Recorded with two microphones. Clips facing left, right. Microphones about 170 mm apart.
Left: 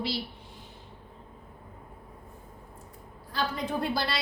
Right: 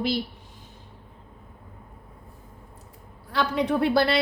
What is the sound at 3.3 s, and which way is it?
Speech, 70° right (ahead or behind).